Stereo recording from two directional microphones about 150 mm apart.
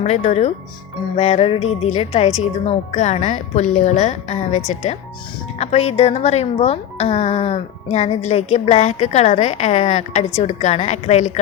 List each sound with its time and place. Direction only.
0.0 s speech: 50° left (ahead or behind)